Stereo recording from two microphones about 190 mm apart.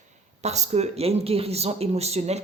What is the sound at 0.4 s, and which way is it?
Speech, 35° right (ahead or behind).